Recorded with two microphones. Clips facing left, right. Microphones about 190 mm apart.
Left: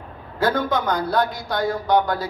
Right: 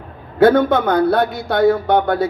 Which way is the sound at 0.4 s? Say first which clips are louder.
Right 9 dB; 60° right (ahead or behind).